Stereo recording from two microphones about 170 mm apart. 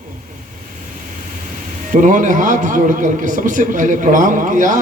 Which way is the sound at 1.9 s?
50° right (ahead or behind).